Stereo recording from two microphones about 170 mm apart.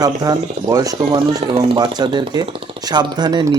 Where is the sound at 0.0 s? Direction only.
20° right (ahead or behind).